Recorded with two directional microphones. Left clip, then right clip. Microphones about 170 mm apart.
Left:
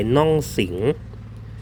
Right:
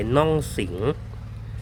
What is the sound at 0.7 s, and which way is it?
Speech, 5° left (ahead or behind).